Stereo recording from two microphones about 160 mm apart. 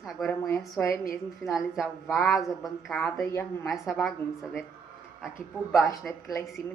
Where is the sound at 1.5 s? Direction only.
Centre (ahead or behind).